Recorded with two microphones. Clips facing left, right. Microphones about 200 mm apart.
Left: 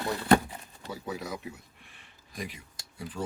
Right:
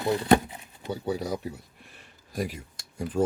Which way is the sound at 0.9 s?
30° right (ahead or behind).